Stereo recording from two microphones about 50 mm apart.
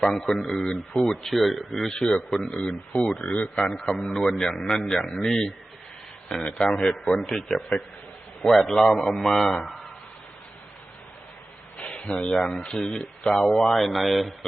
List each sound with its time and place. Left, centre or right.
0.0 s speech: centre
1.9 s a man's voice: centre
3.3 s a man's voice: left
3.8 s a man's voice: centre
6.9 s a man's voice: left
7.2 s a man's voice: centre
11.8 s a sound: left
12.7 s a man's voice: centre